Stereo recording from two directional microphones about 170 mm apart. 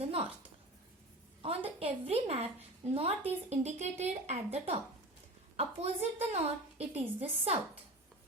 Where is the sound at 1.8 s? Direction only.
35° right (ahead or behind).